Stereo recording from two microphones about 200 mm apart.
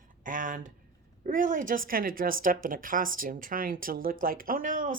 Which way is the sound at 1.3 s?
40° right (ahead or behind).